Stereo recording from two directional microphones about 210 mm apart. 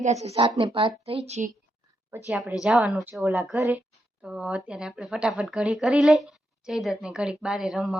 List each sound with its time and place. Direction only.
0.0 s a woman's voice: 30° right (ahead or behind)
2.2 s a woman's voice: centre (ahead or behind)